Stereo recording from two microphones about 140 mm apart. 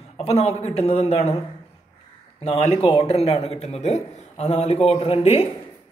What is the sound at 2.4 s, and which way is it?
Speech, 45° left (ahead or behind).